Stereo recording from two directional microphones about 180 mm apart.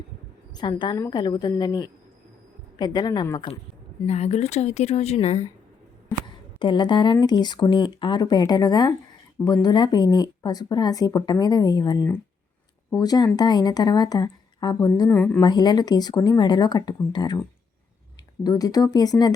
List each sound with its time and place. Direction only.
0.5 s speech: 25° left (ahead or behind)
4.0 s a woman's voice: 35° left (ahead or behind)
6.6 s speech: 25° left (ahead or behind)
15.1 s a woman's voice: 10° left (ahead or behind)
15.4 s speech: 25° left (ahead or behind)
18.4 s speech: 20° left (ahead or behind)